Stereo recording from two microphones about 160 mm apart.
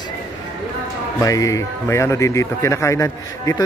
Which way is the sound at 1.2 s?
20° left (ahead or behind).